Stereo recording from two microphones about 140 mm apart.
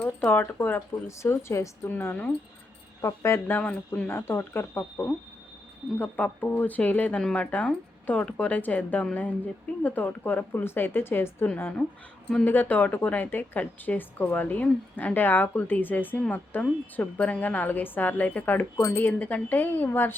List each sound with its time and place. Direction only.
0.0 s a woman's voice: 15° left (ahead or behind)